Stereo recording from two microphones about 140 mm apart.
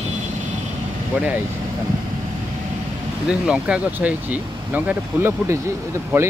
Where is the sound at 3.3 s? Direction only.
5° right (ahead or behind).